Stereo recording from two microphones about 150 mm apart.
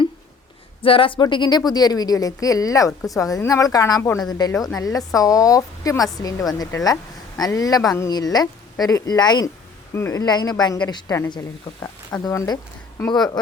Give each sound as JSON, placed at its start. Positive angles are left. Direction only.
{"t": 0.8, "sound": "speech", "side_deg": 35}